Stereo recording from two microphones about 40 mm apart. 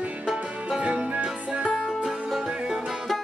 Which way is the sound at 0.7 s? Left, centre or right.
Right.